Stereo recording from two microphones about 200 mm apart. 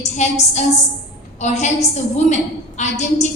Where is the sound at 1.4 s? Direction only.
35° left (ahead or behind).